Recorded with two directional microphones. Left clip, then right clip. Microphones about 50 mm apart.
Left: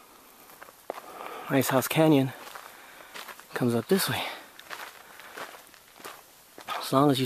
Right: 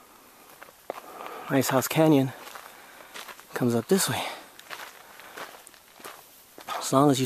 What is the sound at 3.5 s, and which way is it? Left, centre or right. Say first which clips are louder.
Speech: right 1 dB; right.